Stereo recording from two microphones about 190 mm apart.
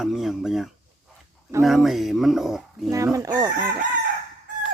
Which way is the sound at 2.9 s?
15° right (ahead or behind).